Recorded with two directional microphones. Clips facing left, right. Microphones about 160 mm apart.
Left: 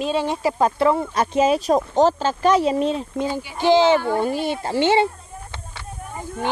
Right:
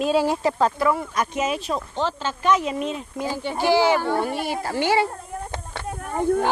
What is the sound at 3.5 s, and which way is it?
Speech, 20° left (ahead or behind).